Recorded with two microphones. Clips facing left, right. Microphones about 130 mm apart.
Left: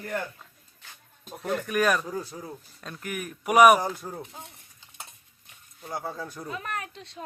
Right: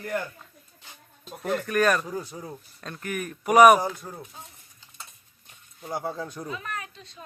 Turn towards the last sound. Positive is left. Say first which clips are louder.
# left 2 dB
turn(degrees=75)  # may be behind; listen again after turning